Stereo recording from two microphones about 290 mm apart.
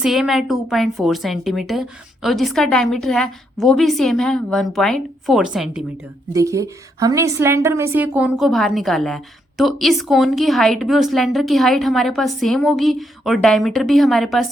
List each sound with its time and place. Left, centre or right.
0.0 s a woman's voice: centre